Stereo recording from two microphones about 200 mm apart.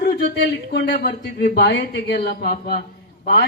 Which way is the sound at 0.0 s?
55° left (ahead or behind).